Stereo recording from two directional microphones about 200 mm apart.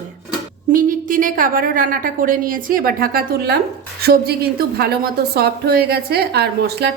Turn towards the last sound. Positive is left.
turn(degrees=-55)  # may be behind; listen again after turning